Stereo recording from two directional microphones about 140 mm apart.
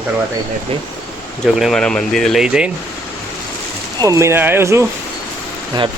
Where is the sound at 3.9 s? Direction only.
25° right (ahead or behind).